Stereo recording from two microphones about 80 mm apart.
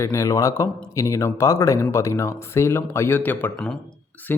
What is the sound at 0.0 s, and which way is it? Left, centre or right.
A man's voice, left.